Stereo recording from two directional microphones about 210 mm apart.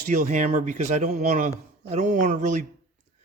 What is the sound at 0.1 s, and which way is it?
Speech, 35° right (ahead or behind).